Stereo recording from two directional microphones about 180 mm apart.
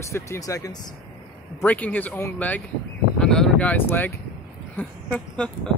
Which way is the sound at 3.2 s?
5° left (ahead or behind).